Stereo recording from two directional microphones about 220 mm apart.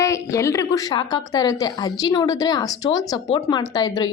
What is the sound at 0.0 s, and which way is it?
A woman's voice, 15° left (ahead or behind).